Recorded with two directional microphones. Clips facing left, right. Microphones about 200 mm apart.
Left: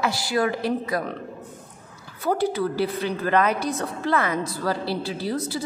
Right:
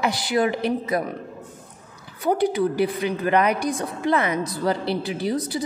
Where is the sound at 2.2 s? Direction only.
15° right (ahead or behind).